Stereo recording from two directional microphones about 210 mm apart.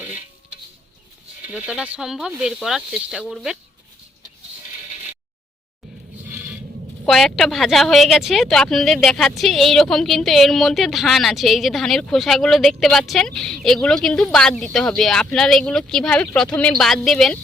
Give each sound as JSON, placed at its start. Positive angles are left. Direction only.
{"t": 1.5, "sound": "a woman's voice", "side_deg": -5}
{"t": 7.0, "sound": "a woman's voice", "side_deg": 0}